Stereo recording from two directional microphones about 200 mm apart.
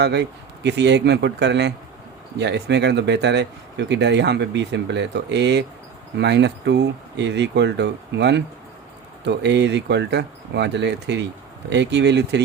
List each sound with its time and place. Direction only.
0.0 s speech: 60° right (ahead or behind)